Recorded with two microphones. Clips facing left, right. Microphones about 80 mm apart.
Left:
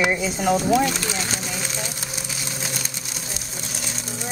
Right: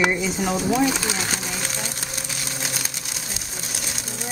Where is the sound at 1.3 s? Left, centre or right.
Centre.